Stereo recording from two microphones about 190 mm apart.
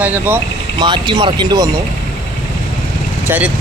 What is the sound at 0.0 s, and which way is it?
Speech, 10° right (ahead or behind).